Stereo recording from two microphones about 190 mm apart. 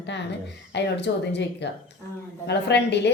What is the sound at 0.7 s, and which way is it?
A woman's voice, 65° left (ahead or behind).